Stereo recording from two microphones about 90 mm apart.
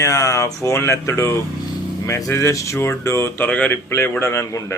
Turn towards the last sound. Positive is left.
turn(degrees=30)  # may be behind; listen again after turning